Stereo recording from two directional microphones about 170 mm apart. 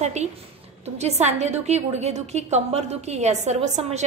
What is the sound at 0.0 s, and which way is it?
A woman's voice, 40° right (ahead or behind).